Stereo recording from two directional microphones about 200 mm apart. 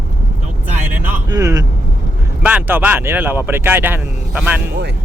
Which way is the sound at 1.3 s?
15° right (ahead or behind).